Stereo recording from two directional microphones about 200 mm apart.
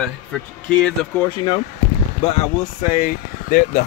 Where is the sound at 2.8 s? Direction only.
35° left (ahead or behind).